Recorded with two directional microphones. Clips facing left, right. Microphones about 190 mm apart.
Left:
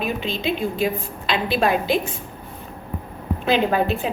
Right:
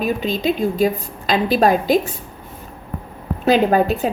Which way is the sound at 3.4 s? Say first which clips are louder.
Right 5 dB; 45° right (ahead or behind).